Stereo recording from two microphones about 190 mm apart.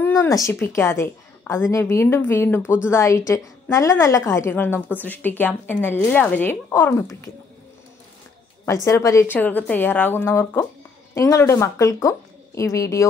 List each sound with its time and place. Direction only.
0.0 s a woman's voice: 15° left (ahead or behind)
8.6 s a woman's voice: 15° left (ahead or behind)